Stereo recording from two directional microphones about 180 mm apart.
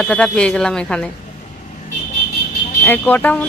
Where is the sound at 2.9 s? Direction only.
10° left (ahead or behind).